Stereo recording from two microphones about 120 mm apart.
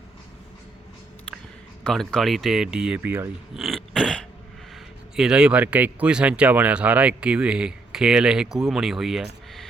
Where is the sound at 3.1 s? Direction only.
20° right (ahead or behind).